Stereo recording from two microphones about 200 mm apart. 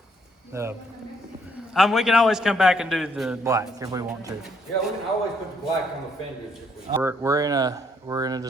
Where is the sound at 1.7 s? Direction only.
Centre (ahead or behind).